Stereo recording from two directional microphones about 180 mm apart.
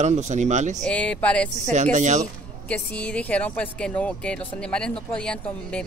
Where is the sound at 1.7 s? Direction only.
40° right (ahead or behind).